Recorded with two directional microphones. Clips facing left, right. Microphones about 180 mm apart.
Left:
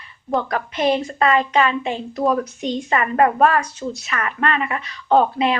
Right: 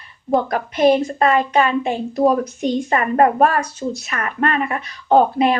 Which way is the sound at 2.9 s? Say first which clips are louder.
Right 1 dB; 40° right (ahead or behind).